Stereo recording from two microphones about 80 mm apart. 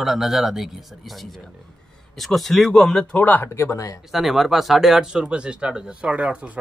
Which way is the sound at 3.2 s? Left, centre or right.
Left.